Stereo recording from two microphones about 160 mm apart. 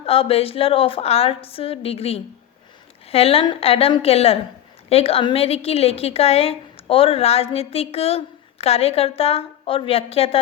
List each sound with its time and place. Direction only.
0.0 s a woman's voice: 35° left (ahead or behind)